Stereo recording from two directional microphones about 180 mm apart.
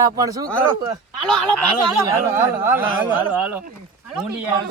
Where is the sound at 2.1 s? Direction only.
15° right (ahead or behind).